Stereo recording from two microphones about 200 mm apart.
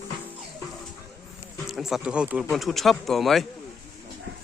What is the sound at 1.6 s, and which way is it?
Speech, centre (ahead or behind).